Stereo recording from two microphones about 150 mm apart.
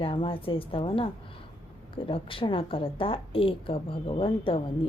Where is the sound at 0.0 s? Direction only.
35° left (ahead or behind).